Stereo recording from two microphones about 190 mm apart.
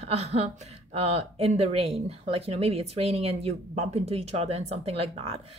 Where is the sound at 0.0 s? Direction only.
30° right (ahead or behind).